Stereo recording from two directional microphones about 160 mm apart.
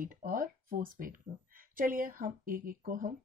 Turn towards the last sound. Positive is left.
turn(degrees=-60)  # may be behind; listen again after turning